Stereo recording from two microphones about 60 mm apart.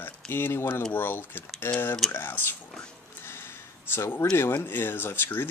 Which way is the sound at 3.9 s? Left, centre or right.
Left.